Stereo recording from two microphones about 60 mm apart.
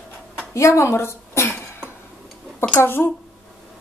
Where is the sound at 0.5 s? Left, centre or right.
Left.